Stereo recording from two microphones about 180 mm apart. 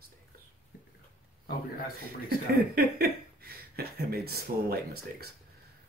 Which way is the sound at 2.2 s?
60° right (ahead or behind).